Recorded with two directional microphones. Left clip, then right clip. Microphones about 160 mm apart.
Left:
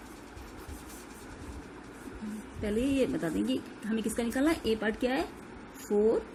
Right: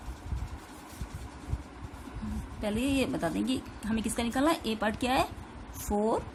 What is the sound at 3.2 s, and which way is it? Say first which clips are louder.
Speech: even; 25° right (ahead or behind).